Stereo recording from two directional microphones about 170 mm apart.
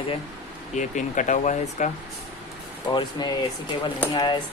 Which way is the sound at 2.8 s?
25° left (ahead or behind).